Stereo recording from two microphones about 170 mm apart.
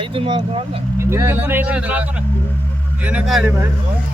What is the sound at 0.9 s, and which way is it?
Speech, 15° right (ahead or behind).